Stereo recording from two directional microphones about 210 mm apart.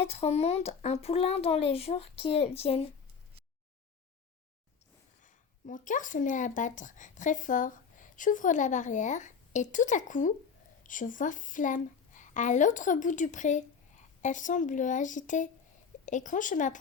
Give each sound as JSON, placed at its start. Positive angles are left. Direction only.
{"t": 0.0, "sound": "speech", "side_deg": 30}
{"t": 5.2, "sound": "a woman's voice", "side_deg": 40}